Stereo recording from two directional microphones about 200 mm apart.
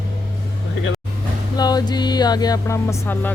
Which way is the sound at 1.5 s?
20° left (ahead or behind).